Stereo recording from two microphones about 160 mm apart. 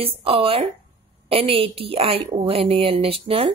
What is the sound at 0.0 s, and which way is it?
Speech, 35° right (ahead or behind).